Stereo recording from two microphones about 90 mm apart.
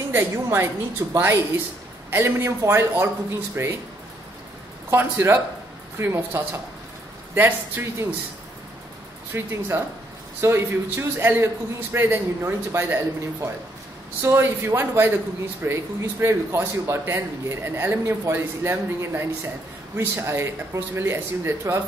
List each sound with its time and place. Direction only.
0.1 s a man's voice: 30° right (ahead or behind)
4.9 s a man's voice: 25° right (ahead or behind)
9.3 s a man's voice: 25° right (ahead or behind)